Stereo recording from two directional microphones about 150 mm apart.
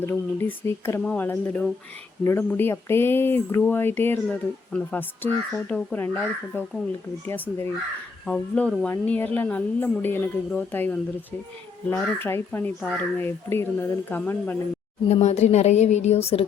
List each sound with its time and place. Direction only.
0.0 s speech: 15° left (ahead or behind)
7.3 s speech: 15° left (ahead or behind)
15.1 s a woman's voice: 45° left (ahead or behind)